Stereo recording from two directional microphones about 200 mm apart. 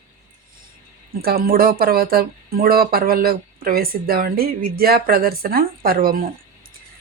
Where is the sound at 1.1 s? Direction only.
50° right (ahead or behind).